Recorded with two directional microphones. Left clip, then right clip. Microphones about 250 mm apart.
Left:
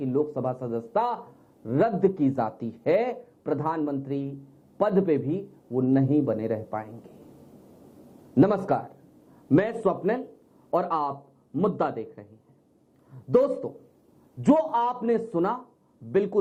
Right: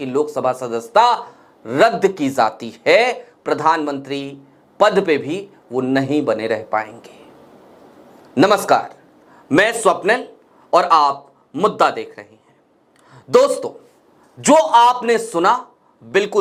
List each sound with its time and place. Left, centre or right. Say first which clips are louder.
0.2 s a man's voice: right 9 dB; right
0.4 s a man's voice: right 10 dB; centre
8.4 s a man's voice: right 9 dB; centre